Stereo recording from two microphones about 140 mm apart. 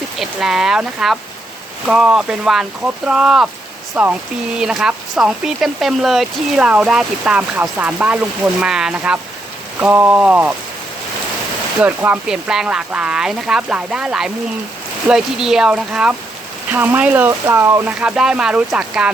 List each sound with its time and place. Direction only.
0.2 s speech: 5° right (ahead or behind)
11.8 s speech: 10° right (ahead or behind)
18.0 s speech: 5° right (ahead or behind)